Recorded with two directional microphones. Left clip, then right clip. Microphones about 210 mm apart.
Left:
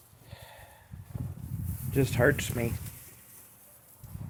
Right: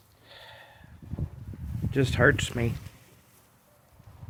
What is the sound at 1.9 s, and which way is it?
Speech, 15° right (ahead or behind).